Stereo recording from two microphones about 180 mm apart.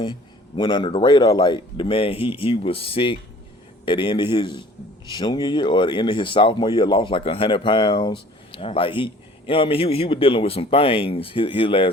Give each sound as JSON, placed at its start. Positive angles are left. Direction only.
{"t": 0.0, "sound": "speech", "side_deg": 30}